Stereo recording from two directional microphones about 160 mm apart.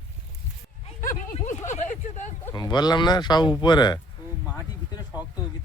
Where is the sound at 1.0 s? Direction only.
50° left (ahead or behind).